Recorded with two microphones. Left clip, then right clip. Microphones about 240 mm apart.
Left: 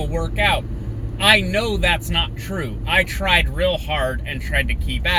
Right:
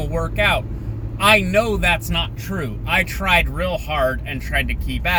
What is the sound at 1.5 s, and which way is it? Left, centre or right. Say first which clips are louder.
Speech: right 2 dB; centre.